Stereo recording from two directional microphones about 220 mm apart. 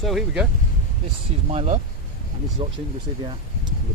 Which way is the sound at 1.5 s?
30° right (ahead or behind).